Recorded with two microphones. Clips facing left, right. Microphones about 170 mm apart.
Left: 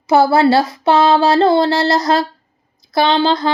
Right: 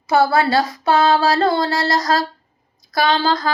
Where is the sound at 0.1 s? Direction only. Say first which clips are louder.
Left 4 dB; 25° left (ahead or behind).